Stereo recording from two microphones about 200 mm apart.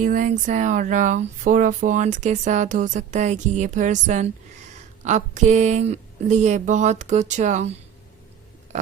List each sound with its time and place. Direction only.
0.0 s speech: 40° right (ahead or behind)